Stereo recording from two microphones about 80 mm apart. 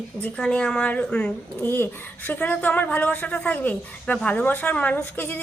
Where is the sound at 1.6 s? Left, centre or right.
Left.